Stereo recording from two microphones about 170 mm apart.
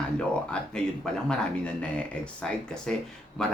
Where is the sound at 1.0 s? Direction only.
Centre (ahead or behind).